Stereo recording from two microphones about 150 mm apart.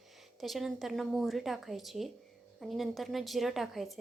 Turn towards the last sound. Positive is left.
turn(degrees=0)  # may be behind; listen again after turning